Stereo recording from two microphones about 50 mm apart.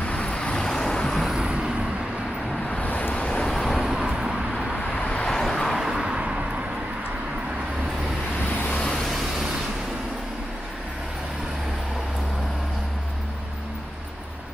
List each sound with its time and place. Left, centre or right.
0.0 s vehicle: left
1.2 s vehicle: centre
1.5 s vehicle: centre
2.7 s vehicle: left
3.2 s vehicle: centre
3.4 s vehicle: centre
3.9 s vehicle: centre
4.9 s vehicle: left
5.3 s vehicle: centre
5.8 s vehicle: centre
6.0 s vehicle: right
8.5 s vehicle: left
9.0 s vehicle: centre